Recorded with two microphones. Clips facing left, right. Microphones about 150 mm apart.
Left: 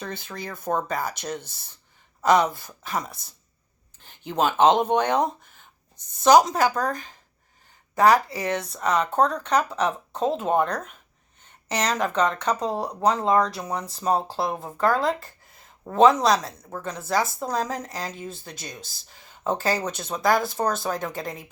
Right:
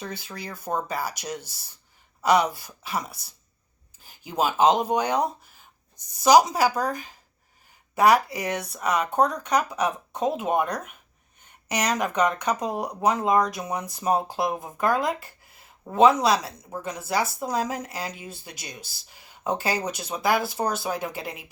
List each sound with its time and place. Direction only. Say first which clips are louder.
0.6 s speech: left 2 dB; 5° right (ahead or behind)
2.4 s speech: left 2 dB; 45° left (ahead or behind)
2.8 s speech: left 1 dB; 10° right (ahead or behind)